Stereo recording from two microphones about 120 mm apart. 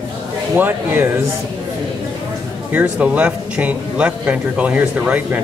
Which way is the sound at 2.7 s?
10° right (ahead or behind).